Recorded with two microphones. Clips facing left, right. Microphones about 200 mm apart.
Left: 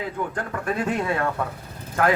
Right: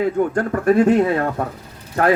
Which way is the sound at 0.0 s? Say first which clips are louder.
Right 10 dB; 45° right (ahead or behind).